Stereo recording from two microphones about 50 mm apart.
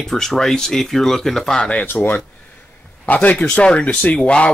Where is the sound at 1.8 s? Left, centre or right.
Left.